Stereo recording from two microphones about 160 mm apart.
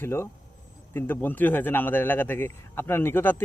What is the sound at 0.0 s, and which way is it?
Speech, 15° left (ahead or behind).